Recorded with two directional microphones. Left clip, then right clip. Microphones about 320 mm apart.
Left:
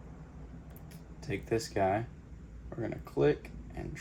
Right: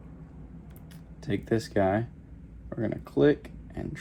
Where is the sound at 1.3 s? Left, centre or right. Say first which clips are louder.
Right 4 dB; right.